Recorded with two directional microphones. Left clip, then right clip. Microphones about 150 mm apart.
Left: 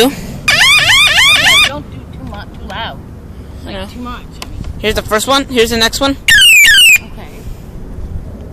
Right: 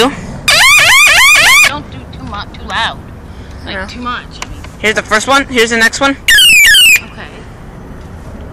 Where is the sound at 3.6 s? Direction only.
20° left (ahead or behind).